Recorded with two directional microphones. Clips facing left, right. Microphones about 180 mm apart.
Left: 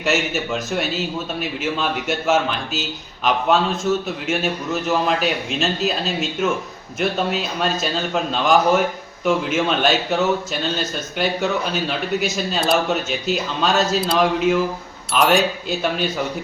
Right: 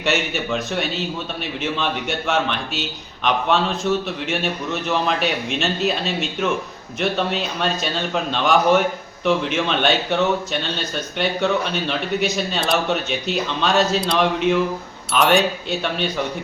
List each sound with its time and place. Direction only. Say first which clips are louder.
0.0 s a man's voice: left 1 dB; centre (ahead or behind)
11.9 s a man's voice: even; centre (ahead or behind)